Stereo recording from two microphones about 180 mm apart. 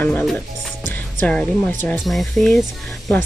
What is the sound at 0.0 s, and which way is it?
Speech, 5° left (ahead or behind).